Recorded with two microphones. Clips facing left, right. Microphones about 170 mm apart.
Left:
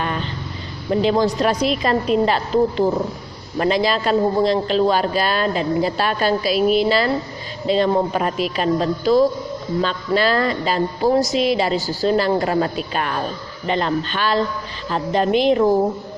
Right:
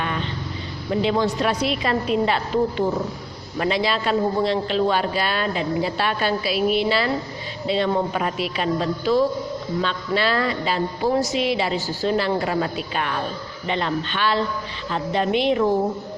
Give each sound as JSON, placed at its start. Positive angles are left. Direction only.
{"t": 0.9, "sound": "a man's voice", "side_deg": 40}